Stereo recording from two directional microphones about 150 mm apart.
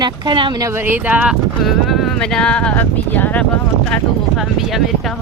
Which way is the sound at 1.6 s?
Centre (ahead or behind).